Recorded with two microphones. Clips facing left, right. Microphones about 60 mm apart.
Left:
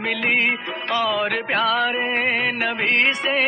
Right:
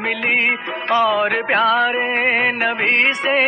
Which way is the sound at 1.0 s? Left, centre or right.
Centre.